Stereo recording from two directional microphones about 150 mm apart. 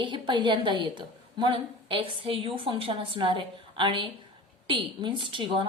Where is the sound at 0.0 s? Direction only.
30° right (ahead or behind).